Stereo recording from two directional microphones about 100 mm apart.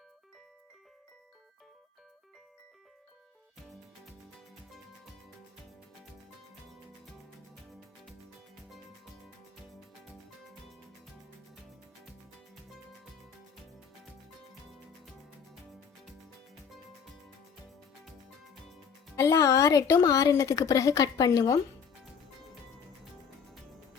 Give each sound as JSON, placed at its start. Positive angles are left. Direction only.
{"t": 19.1, "sound": "a woman's voice", "side_deg": 30}